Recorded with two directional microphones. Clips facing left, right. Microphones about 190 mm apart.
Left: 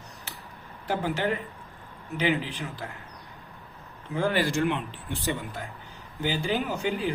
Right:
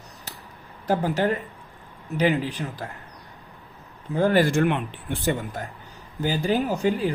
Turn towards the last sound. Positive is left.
turn(degrees=-40)  # may be behind; listen again after turning